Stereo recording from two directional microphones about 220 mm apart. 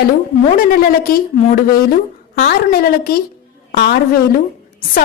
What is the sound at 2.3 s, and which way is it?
A woman's voice, 40° left (ahead or behind).